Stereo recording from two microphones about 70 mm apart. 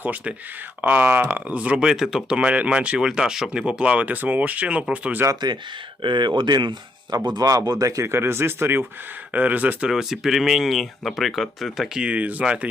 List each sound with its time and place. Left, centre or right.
0.0 s speech: right; by 3.7 s centre
3.7 s speech: centre
5.3 s speech: right
7.9 s speech: right
9.3 s speech: right
9.9 s speech: centre
11.9 s speech: centre